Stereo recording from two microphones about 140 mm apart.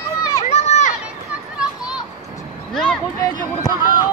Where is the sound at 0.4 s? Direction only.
55° left (ahead or behind).